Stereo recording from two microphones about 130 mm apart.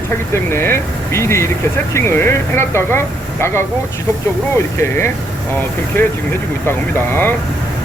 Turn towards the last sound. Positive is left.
turn(degrees=15)  # may be behind; listen again after turning